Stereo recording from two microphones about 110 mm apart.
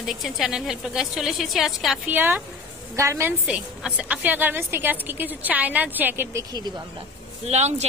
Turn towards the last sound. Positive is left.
turn(degrees=-85)